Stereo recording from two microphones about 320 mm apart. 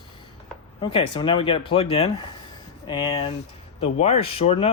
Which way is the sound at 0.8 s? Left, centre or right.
Centre.